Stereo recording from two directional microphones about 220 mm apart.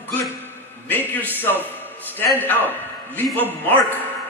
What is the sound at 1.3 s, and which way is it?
A man's voice, 10° left (ahead or behind).